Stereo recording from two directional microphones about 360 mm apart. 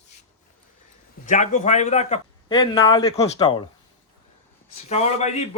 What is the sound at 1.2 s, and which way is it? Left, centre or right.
Speech, left.